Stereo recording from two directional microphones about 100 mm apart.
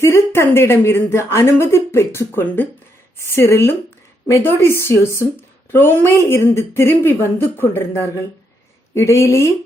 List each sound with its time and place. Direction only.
0.0 s a woman's voice: 25° left (ahead or behind)